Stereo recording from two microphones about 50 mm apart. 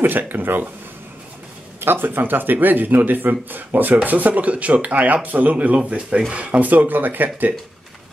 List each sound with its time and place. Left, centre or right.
0.0 s speech: right
1.8 s speech: right